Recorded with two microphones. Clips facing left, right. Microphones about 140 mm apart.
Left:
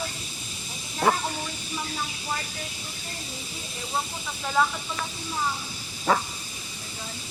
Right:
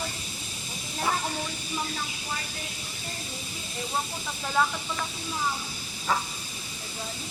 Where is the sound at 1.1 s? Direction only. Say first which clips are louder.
Left 6 dB; 65° left (ahead or behind).